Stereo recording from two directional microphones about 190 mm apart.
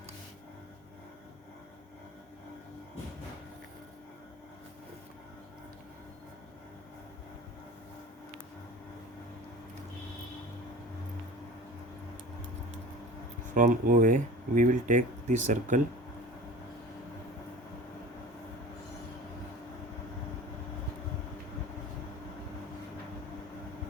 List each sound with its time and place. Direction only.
13.5 s speech: 45° right (ahead or behind)